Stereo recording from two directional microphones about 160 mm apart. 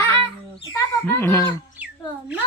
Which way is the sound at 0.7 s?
15° left (ahead or behind).